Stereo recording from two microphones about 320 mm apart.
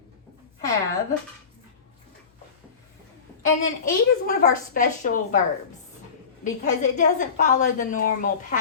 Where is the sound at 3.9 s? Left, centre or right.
Left.